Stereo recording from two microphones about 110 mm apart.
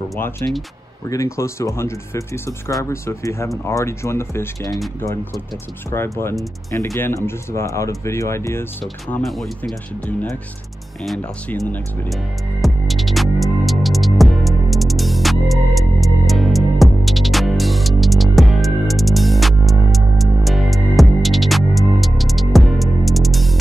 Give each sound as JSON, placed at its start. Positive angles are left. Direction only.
{"t": 1.0, "sound": "speech", "side_deg": 25}
{"t": 12.6, "sound": "music", "side_deg": 0}